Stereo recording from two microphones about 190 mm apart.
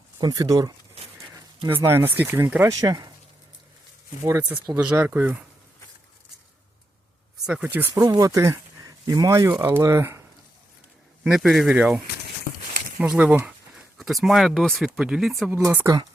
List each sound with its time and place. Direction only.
0.2 s speech: 20° right (ahead or behind)
4.2 s speech: 10° right (ahead or behind)
7.4 s speech: 5° right (ahead or behind)
11.2 s speech: centre (ahead or behind)
15.5 s speech: 10° right (ahead or behind)